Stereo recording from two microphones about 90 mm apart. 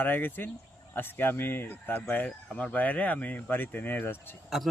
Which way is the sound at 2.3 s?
10° left (ahead or behind).